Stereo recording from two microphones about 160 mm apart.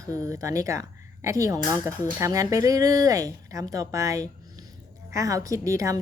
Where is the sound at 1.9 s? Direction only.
10° left (ahead or behind).